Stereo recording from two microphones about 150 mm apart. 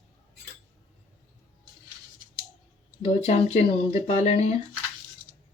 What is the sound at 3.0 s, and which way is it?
Speech, 45° left (ahead or behind).